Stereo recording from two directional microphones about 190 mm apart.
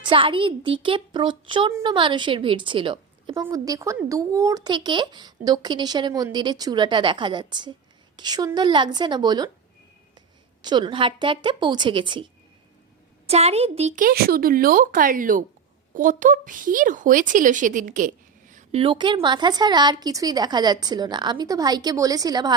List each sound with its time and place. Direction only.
0.0 s speech: 25° right (ahead or behind)
10.6 s a woman's voice: 25° right (ahead or behind); by 18.8 s 40° right (ahead or behind)
18.8 s speech: 25° right (ahead or behind)